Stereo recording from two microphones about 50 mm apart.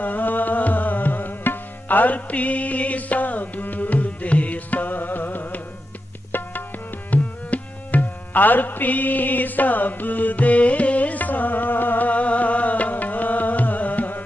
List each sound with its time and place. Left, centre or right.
0.0 s music: left
6.3 s tabla: left
7.1 s tabla: left